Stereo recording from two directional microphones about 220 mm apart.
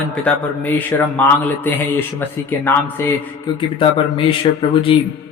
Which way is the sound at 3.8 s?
25° left (ahead or behind).